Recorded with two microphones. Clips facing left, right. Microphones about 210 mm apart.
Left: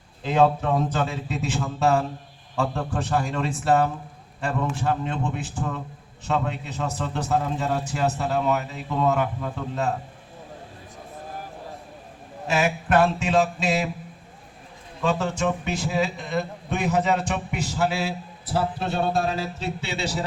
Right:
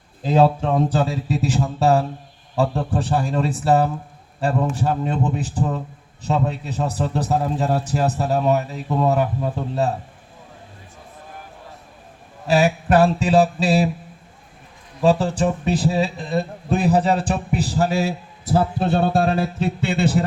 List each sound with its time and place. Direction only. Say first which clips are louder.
0.2 s a man's voice: right 3 dB; 35° right (ahead or behind)
12.5 s a man's voice: right 6 dB; 35° right (ahead or behind)
15.0 s a man's voice: right 6 dB; 35° right (ahead or behind); by 20.2 s 55° right (ahead or behind)